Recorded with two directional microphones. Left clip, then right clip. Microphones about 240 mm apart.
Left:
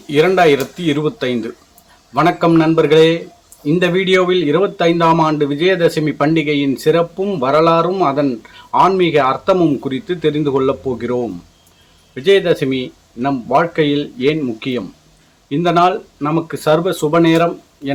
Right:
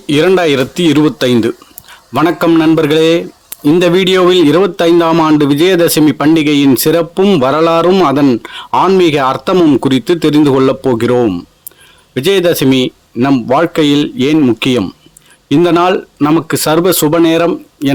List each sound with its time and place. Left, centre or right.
0.1 s speech: right